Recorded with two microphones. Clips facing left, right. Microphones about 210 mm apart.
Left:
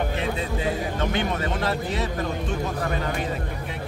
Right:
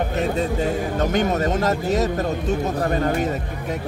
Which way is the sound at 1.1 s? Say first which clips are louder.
Right 6 dB; 40° right (ahead or behind).